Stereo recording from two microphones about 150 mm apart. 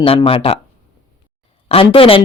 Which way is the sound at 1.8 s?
35° left (ahead or behind).